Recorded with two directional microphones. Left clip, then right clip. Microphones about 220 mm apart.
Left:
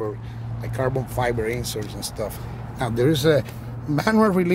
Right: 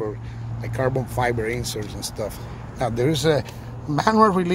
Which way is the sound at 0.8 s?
15° right (ahead or behind).